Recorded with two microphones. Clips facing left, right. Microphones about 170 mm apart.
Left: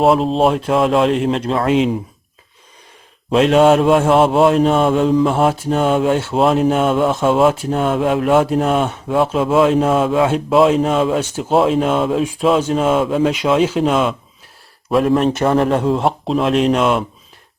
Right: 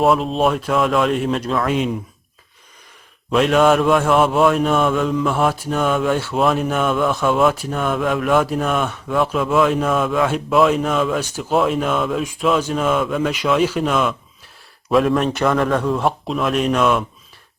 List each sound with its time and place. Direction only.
0.0 s speech: 30° left (ahead or behind)
3.3 s speech: 30° left (ahead or behind)